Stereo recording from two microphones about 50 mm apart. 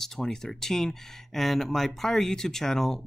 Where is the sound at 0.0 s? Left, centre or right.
Centre.